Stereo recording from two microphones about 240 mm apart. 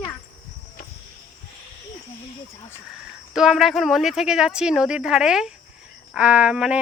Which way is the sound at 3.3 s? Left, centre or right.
Centre.